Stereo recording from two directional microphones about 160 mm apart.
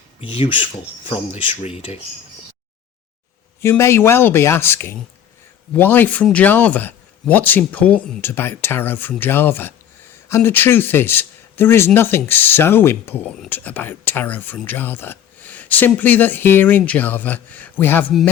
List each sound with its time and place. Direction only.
0.2 s speech: 35° left (ahead or behind)
3.6 s speech: 15° left (ahead or behind)